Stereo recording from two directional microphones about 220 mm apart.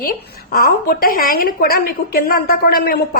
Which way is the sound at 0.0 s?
45° left (ahead or behind).